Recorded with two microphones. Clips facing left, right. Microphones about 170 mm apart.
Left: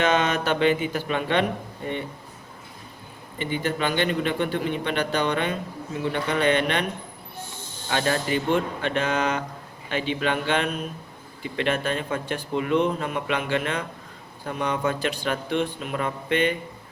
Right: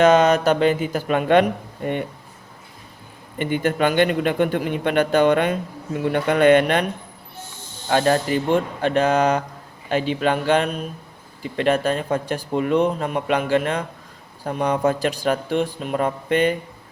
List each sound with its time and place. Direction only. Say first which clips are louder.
0.0 s a man's voice: right 8 dB; 40° right (ahead or behind)
3.3 s a man's voice: right 5 dB; 50° right (ahead or behind)
7.9 s speech: right 6 dB; 45° right (ahead or behind)